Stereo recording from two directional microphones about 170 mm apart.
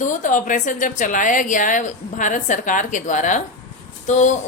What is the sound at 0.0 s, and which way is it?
A woman's voice, 45° left (ahead or behind).